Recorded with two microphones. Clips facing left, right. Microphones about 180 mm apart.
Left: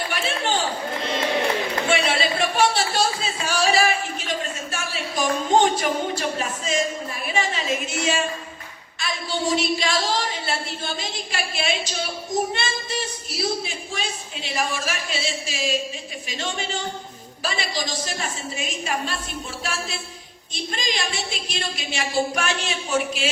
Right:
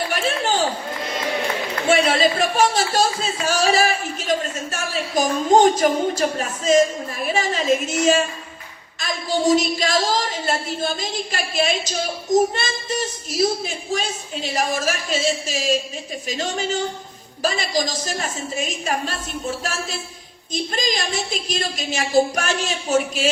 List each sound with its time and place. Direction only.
0.1 s chatter: 40° right (ahead or behind)
1.9 s a sound: 40° right (ahead or behind)
4.3 s a woman's voice: 45° right (ahead or behind)